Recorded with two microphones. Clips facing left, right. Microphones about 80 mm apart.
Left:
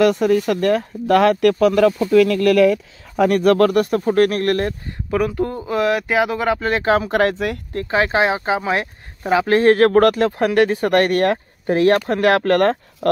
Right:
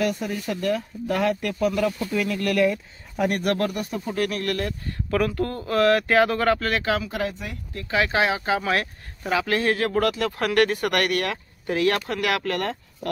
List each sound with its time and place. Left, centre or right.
0.0 s speech: left
2.1 s speech: left
4.8 s speech: centre
6.7 s speech: left
7.1 s speech: left
7.7 s speech: left
9.8 s speech: left
10.2 s speech: left
12.5 s speech: left